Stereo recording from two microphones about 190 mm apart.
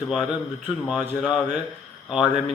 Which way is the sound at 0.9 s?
5° right (ahead or behind).